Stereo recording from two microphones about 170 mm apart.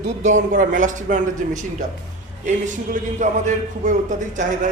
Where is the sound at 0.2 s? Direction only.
45° right (ahead or behind).